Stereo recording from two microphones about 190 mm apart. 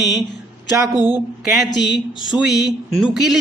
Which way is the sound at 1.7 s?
65° left (ahead or behind).